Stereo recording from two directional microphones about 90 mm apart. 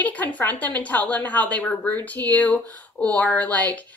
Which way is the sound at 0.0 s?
20° left (ahead or behind).